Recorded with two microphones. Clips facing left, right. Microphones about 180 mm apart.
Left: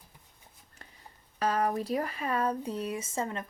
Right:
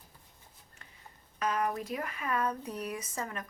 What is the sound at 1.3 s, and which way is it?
Speech, 35° left (ahead or behind).